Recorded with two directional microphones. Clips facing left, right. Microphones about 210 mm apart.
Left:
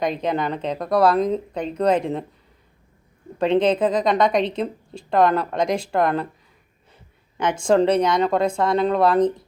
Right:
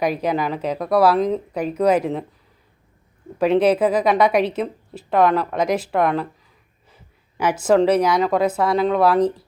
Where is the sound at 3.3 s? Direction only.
5° right (ahead or behind).